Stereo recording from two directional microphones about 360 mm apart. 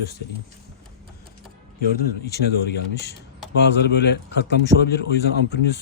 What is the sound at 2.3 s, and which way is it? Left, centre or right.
A man's voice, left.